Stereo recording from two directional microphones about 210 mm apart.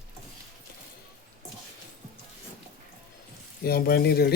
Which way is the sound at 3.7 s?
45° left (ahead or behind).